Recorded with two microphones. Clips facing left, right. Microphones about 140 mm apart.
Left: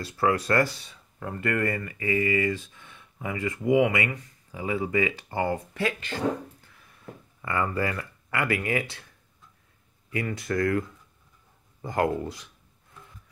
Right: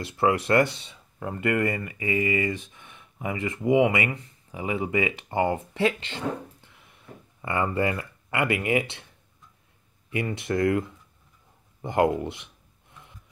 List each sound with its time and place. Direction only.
0.0 s speech: 25° right (ahead or behind)